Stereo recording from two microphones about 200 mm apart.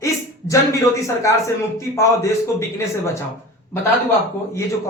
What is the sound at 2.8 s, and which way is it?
Speech, 15° left (ahead or behind).